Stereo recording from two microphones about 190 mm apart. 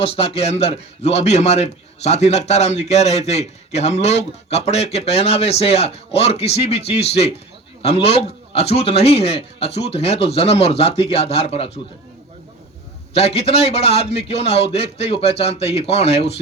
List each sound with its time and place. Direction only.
0.0 s a man's voice: 30° left (ahead or behind)
13.1 s a man's voice: 30° left (ahead or behind)